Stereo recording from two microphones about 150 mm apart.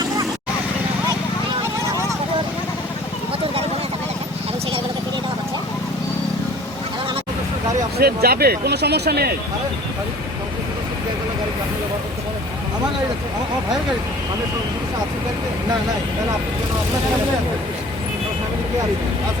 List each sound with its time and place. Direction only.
7.9 s speech: 90° right